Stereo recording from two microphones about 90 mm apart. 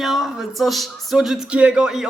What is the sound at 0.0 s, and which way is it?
A man's voice, centre (ahead or behind).